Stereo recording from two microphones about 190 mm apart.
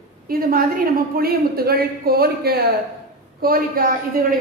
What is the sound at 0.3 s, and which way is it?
A woman's voice, 50° right (ahead or behind).